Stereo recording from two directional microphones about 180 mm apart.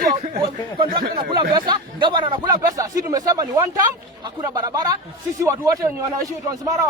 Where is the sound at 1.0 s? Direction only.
55° right (ahead or behind).